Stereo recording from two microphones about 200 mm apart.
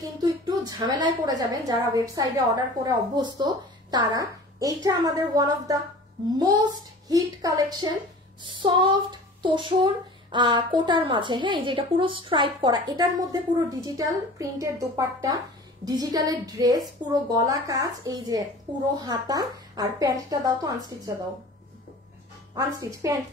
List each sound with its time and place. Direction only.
0.0 s a woman's voice: 20° right (ahead or behind)
22.5 s a woman's voice: 20° right (ahead or behind)